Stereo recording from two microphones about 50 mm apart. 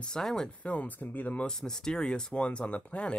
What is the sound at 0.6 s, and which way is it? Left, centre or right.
Speech, left.